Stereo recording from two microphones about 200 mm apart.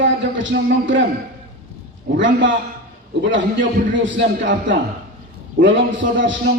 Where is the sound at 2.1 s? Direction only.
70° right (ahead or behind).